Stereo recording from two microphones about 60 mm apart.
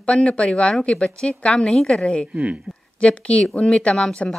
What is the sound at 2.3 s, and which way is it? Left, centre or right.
Speech, right.